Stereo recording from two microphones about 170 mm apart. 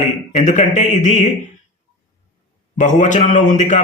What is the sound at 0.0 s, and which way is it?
Speech, 45° left (ahead or behind).